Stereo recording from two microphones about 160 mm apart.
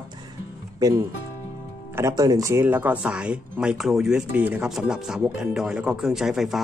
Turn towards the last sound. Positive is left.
turn(degrees=0)  # may be behind; listen again after turning